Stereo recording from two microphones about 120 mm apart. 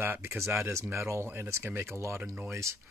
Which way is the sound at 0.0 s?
20° right (ahead or behind).